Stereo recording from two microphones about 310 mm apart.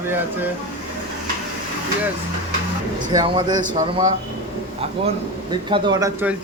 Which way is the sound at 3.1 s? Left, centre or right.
Centre.